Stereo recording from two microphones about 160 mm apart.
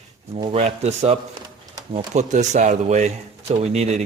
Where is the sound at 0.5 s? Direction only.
45° right (ahead or behind).